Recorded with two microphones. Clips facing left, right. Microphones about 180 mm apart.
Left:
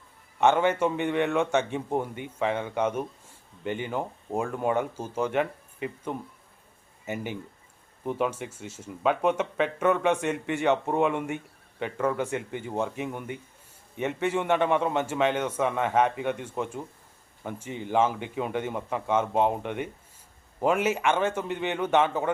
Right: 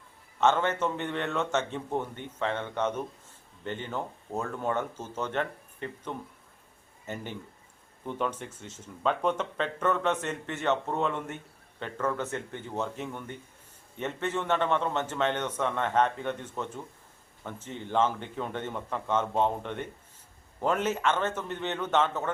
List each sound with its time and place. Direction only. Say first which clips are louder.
0.3 s speech: left 3 dB; 15° left (ahead or behind)